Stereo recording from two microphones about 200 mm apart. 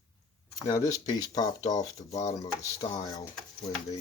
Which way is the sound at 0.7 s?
20° left (ahead or behind).